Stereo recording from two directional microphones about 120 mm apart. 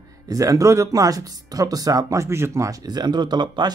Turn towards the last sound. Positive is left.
turn(degrees=-35)  # may be behind; listen again after turning